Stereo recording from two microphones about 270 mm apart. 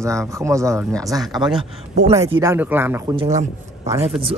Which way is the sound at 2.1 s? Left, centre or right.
Centre.